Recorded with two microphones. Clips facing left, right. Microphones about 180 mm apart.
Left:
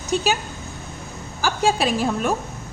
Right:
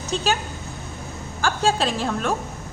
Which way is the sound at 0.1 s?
10° left (ahead or behind).